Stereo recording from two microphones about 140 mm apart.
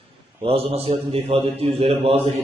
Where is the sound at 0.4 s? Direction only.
45° right (ahead or behind).